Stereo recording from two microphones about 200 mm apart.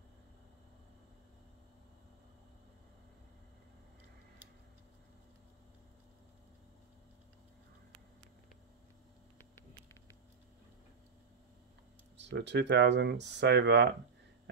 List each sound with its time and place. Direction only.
12.2 s speech: 60° right (ahead or behind)